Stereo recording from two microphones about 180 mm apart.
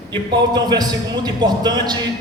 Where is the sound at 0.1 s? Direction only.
25° right (ahead or behind).